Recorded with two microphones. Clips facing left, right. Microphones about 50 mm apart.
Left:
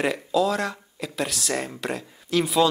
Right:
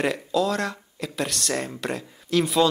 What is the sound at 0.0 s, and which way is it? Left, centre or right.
Speech, centre.